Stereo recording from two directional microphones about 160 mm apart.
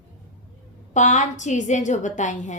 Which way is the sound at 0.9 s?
50° left (ahead or behind).